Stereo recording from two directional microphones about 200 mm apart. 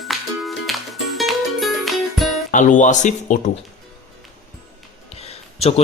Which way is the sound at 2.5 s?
40° left (ahead or behind).